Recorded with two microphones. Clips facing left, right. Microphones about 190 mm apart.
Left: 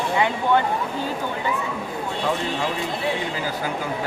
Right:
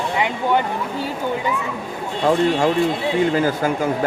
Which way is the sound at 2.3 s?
45° right (ahead or behind).